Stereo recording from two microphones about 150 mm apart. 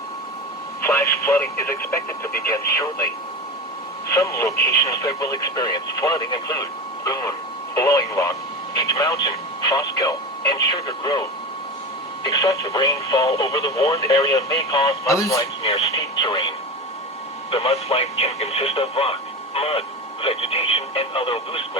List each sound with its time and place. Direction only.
0.8 s a sound: 15° left (ahead or behind)
1.1 s speech: 15° left (ahead or behind)
2.5 s speech: 20° left (ahead or behind)
4.1 s speech: 20° left (ahead or behind)
12.2 s speech: 25° left (ahead or behind)
15.6 s speech: 40° left (ahead or behind)
16.1 s speech: 30° left (ahead or behind)